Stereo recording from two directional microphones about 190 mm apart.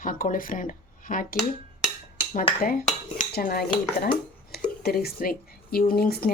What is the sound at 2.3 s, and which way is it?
Speech, 50° left (ahead or behind).